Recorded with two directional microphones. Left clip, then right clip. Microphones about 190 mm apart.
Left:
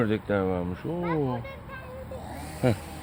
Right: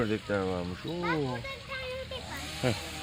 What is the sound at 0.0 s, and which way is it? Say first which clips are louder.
Speech: left 4 dB; 5° left (ahead or behind).